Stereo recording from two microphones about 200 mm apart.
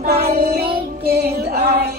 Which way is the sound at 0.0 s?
50° right (ahead or behind).